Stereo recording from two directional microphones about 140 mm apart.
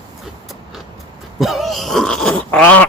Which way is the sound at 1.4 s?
Centre (ahead or behind).